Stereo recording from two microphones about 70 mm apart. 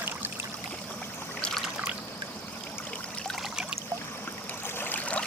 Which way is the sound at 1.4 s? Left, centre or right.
Centre.